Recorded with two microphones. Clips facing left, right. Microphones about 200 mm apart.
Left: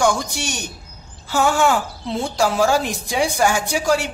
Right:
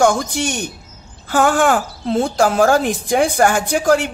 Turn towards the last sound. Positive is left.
turn(degrees=-55)  # may be behind; listen again after turning